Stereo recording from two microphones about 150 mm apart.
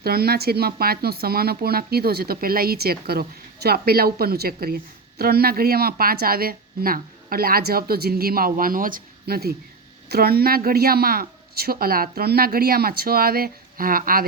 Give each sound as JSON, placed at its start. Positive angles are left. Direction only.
{"t": 0.0, "sound": "a woman's voice", "side_deg": -90}